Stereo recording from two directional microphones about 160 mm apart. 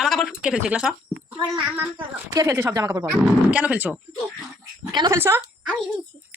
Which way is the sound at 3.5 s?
10° right (ahead or behind).